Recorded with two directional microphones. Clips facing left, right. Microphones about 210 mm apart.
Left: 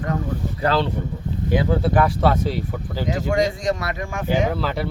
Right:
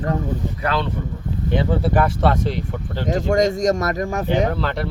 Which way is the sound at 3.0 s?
45° right (ahead or behind).